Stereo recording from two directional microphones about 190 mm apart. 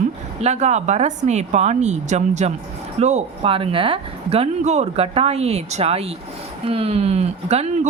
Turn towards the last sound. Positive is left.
turn(degrees=-35)  # may be behind; listen again after turning